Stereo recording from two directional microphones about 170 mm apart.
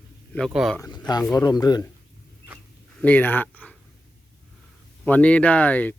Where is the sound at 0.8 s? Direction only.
25° left (ahead or behind).